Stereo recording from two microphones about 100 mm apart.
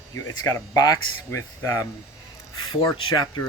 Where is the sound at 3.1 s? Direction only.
45° left (ahead or behind).